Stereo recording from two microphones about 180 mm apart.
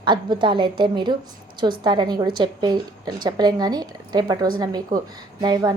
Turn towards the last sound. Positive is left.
turn(degrees=-25)  # may be behind; listen again after turning